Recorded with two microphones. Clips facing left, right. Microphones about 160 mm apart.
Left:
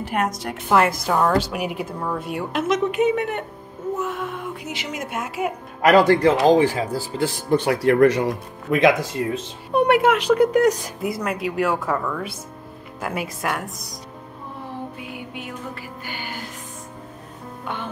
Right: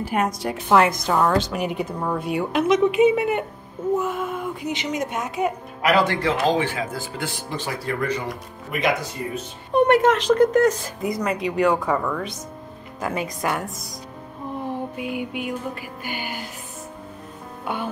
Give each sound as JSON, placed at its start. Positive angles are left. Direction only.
{"t": 0.0, "sound": "a woman's voice", "side_deg": 0}
{"t": 5.8, "sound": "speech", "side_deg": 45}
{"t": 7.4, "sound": "speech", "side_deg": 60}
{"t": 9.7, "sound": "a woman's voice", "side_deg": 10}
{"t": 15.0, "sound": "music", "side_deg": -15}